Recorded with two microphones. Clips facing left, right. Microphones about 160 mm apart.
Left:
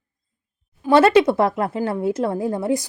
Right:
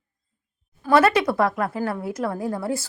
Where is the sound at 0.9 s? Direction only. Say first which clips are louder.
Left 4 dB; 25° left (ahead or behind).